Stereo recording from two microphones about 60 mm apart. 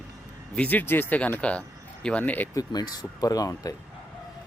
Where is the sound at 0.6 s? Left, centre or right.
Left.